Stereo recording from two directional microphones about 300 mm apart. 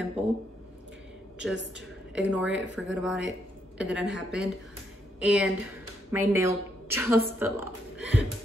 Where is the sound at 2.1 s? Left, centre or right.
Centre.